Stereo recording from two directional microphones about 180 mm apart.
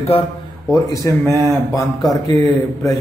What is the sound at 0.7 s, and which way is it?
A man's voice, 20° left (ahead or behind).